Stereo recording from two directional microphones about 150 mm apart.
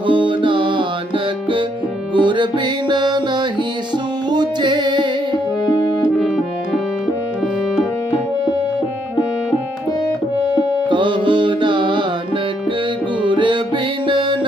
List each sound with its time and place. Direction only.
0.1 s music: 35° right (ahead or behind)
2.1 s music: 30° right (ahead or behind)
6.0 s music: 5° right (ahead or behind)
10.8 s music: 30° right (ahead or behind)
13.2 s music: 35° right (ahead or behind)